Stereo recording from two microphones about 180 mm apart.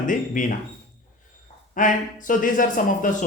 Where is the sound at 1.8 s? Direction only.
45° left (ahead or behind).